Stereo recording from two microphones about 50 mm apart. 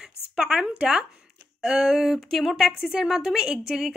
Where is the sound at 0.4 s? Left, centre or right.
Centre.